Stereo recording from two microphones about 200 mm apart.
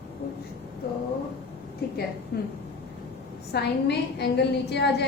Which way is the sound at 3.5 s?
55° left (ahead or behind).